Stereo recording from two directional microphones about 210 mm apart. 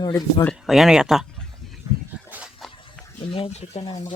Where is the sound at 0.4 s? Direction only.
Centre (ahead or behind).